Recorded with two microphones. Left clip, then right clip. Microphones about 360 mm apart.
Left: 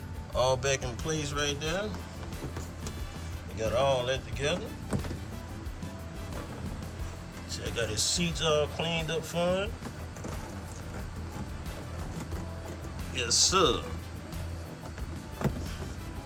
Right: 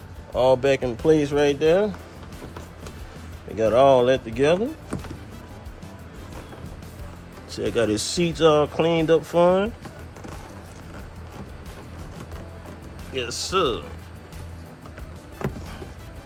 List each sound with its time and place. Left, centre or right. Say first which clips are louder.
0.3 s speech: right 9 dB; centre
3.6 s speech: right 12 dB; centre
7.5 s speech: right 11 dB; centre
13.1 s speech: right 2 dB; centre